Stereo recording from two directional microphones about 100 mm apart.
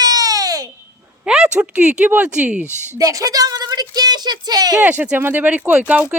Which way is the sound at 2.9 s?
35° right (ahead or behind).